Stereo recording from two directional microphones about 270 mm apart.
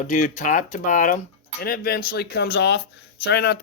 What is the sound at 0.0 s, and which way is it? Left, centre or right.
Speech, left.